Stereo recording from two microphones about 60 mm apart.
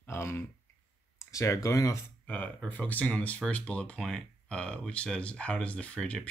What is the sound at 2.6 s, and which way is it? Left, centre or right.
Speech, left.